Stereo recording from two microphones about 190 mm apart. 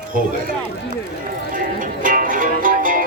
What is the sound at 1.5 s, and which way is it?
Music, 45° right (ahead or behind).